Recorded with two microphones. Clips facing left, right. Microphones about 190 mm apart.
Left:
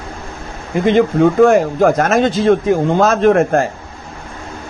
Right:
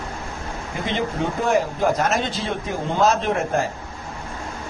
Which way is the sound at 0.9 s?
55° left (ahead or behind).